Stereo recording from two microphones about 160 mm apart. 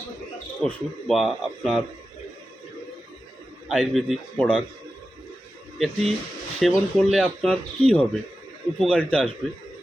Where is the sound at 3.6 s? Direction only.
Centre (ahead or behind).